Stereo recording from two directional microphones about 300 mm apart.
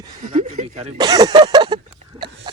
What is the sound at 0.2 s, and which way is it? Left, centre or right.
Speech, right.